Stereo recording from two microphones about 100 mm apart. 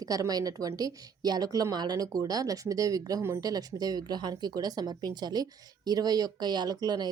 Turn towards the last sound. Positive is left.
turn(degrees=-45)  # may be behind; listen again after turning